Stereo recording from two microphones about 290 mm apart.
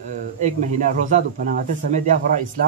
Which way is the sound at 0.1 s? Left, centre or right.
Right.